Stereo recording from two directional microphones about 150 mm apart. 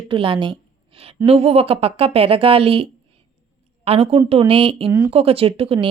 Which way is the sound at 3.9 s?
40° right (ahead or behind).